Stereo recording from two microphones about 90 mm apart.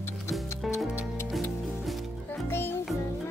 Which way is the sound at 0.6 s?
Centre (ahead or behind).